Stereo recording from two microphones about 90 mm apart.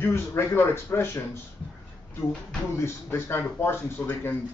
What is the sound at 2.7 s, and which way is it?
A man's voice, 30° left (ahead or behind).